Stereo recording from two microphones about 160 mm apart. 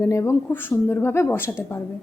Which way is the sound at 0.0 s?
20° left (ahead or behind).